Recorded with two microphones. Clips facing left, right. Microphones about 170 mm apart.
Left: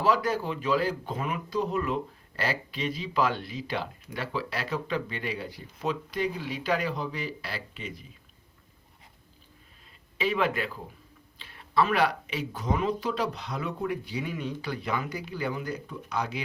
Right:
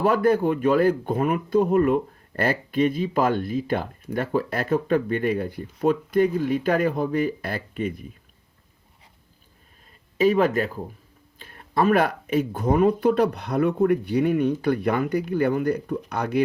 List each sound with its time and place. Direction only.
0.0 s speech: 55° right (ahead or behind)
10.2 s speech: 45° right (ahead or behind)